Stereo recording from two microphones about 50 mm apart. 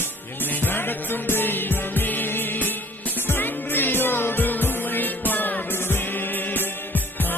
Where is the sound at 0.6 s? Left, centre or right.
Left.